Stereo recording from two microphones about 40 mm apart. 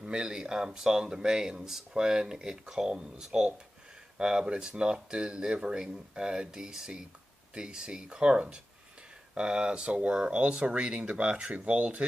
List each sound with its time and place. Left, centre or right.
0.0 s speech: right